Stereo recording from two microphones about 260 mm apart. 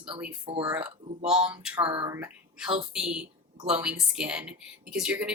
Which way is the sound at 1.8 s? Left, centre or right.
Centre.